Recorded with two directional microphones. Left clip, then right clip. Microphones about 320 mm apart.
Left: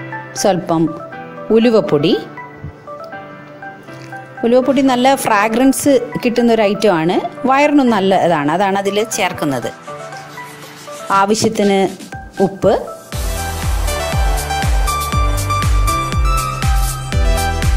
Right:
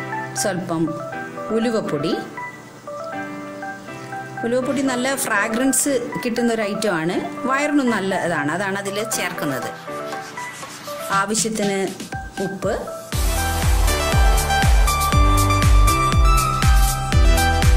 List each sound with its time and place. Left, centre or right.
0.4 s speech: centre
4.5 s speech: centre
11.1 s speech: centre
13.1 s music: centre